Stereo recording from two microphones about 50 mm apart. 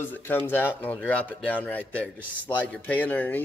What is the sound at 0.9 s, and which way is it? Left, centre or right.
A man's voice, left.